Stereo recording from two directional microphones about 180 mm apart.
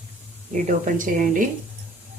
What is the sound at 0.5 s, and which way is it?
Speech, 45° right (ahead or behind).